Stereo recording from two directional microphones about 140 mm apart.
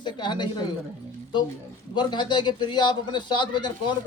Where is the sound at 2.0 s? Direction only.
30° left (ahead or behind).